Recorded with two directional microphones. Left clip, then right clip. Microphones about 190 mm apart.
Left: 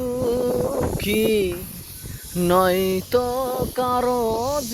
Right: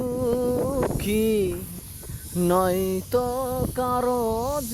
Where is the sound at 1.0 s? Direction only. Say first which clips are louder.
Left 5 dB; 45° right (ahead or behind).